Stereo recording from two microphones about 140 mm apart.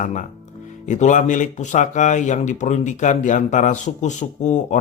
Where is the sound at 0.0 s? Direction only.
65° left (ahead or behind).